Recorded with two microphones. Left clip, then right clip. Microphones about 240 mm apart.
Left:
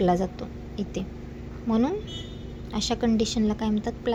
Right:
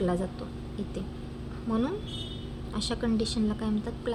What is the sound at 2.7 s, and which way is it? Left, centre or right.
A woman's voice, centre.